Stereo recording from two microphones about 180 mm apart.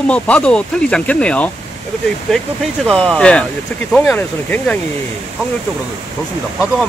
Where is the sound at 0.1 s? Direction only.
5° left (ahead or behind).